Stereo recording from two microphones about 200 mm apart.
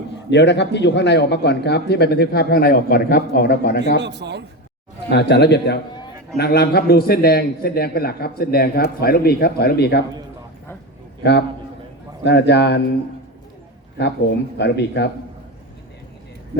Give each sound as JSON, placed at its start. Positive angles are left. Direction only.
{"t": 0.3, "sound": "speech", "side_deg": 60}
{"t": 3.9, "sound": "speech", "side_deg": -60}
{"t": 5.0, "sound": "a man's voice", "side_deg": 55}
{"t": 11.2, "sound": "a man's voice", "side_deg": 60}
{"t": 14.0, "sound": "speech", "side_deg": 60}